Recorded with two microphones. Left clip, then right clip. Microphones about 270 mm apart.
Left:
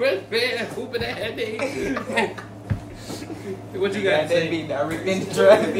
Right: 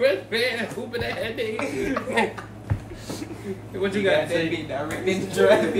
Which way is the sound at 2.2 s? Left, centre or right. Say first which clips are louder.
Even; centre.